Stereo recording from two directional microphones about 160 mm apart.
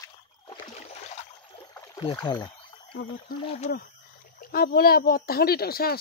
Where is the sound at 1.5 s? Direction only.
35° left (ahead or behind).